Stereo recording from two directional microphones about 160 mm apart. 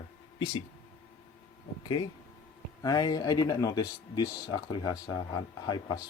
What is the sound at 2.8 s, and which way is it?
Speech, 25° left (ahead or behind).